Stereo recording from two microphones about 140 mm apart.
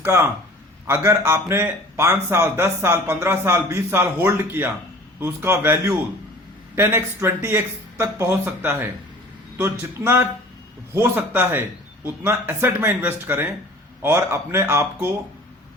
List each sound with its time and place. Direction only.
0.9 s a man's voice: 15° right (ahead or behind)